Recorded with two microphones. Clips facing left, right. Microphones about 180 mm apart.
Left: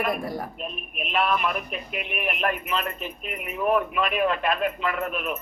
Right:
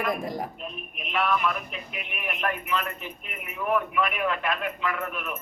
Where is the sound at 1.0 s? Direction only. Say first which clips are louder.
Left 1 dB; 25° left (ahead or behind).